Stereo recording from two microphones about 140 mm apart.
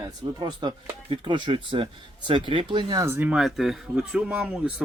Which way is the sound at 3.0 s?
15° right (ahead or behind).